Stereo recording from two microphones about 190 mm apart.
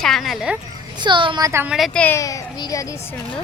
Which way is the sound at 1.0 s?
25° right (ahead or behind).